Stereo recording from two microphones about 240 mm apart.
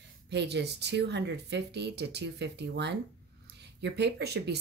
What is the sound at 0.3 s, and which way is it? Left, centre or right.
Speech, right.